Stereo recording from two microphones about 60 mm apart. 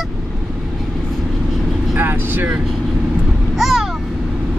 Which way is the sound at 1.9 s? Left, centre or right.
Right.